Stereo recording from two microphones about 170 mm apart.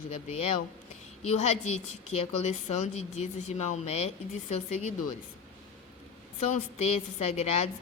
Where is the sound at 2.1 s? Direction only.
40° left (ahead or behind).